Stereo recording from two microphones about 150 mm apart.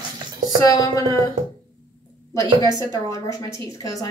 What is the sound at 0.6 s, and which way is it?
Speech, 25° left (ahead or behind).